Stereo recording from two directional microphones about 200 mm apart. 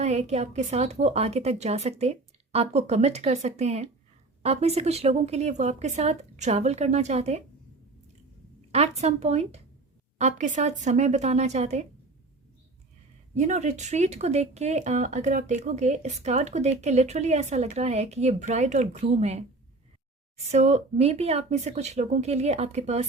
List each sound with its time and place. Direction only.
0.0 s speech: 35° right (ahead or behind)
8.7 s speech: 35° right (ahead or behind)
13.3 s speech: 35° right (ahead or behind)